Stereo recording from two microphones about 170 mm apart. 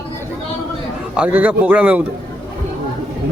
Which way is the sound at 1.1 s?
10° right (ahead or behind).